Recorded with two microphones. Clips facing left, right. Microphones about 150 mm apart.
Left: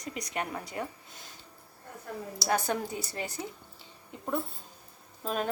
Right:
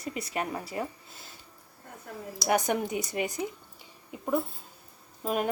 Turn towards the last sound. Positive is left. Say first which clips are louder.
# right 3 dB
turn(degrees=-10)  # may be behind; listen again after turning